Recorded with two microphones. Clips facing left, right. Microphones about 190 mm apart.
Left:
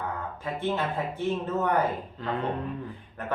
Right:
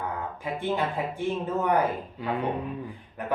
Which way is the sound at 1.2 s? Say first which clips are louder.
Even; 10° right (ahead or behind).